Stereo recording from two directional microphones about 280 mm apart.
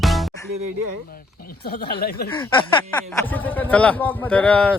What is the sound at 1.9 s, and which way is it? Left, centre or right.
Speech, left.